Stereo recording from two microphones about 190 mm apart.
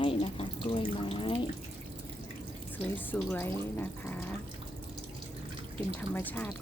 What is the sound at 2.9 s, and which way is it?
Speech, 10° left (ahead or behind).